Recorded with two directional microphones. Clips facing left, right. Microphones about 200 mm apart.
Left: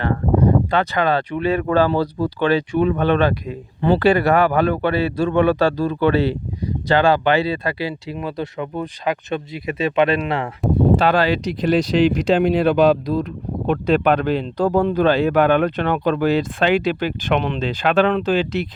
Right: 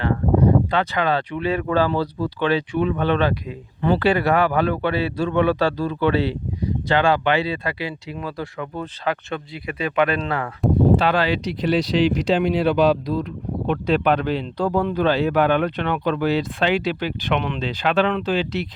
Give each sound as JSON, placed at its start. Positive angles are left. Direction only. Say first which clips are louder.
{"t": 0.7, "sound": "speech", "louder": "left 2 dB", "side_deg": 45}
{"t": 3.8, "sound": "speech", "louder": "left 3 dB", "side_deg": 30}
{"t": 4.0, "sound": "speech", "louder": "left 4 dB", "side_deg": 45}
{"t": 8.2, "sound": "speech", "louder": "left 3 dB", "side_deg": 20}
{"t": 10.9, "sound": "speech", "louder": "left 2 dB", "side_deg": 45}